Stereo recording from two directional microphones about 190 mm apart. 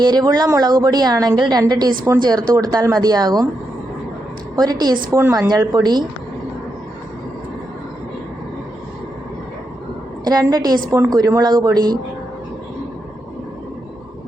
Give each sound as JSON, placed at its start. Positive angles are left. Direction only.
{"t": 0.0, "sound": "speech", "side_deg": -20}
{"t": 4.5, "sound": "speech", "side_deg": -20}
{"t": 10.2, "sound": "speech", "side_deg": -20}